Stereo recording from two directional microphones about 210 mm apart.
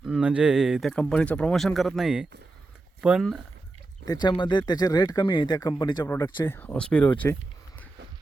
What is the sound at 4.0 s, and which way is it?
Speech, 20° left (ahead or behind).